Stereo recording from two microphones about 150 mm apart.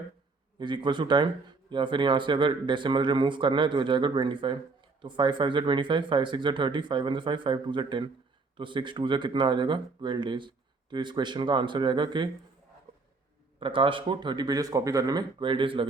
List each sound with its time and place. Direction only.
0.6 s speech: 30° right (ahead or behind)
13.6 s speech: 35° right (ahead or behind)